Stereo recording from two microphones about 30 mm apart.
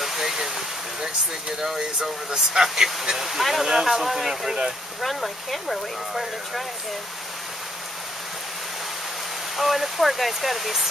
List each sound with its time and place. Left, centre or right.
0.0 s stream: centre
1.8 s speech: right; by 4.5 s centre
4.5 s speech: right
5.0 s speech: centre
9.6 s speech: centre